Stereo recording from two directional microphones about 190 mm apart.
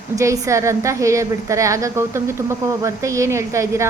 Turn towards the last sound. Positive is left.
turn(degrees=-15)  # may be behind; listen again after turning